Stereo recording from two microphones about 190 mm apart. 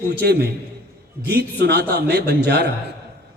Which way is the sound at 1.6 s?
60° right (ahead or behind).